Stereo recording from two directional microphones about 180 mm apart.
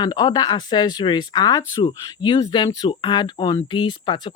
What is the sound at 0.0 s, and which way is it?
Speech, 25° left (ahead or behind).